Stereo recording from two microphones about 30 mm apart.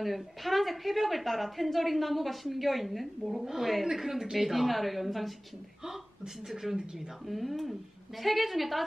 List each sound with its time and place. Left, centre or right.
0.0 s a woman's voice: centre
5.9 s speech: centre
7.2 s a woman's voice: centre